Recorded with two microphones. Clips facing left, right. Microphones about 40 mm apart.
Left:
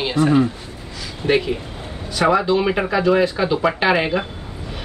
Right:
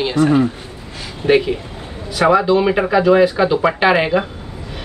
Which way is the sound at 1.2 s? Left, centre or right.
Right.